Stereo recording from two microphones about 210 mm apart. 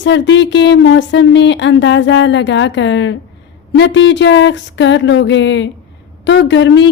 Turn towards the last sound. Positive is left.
turn(degrees=60)  # may be behind; listen again after turning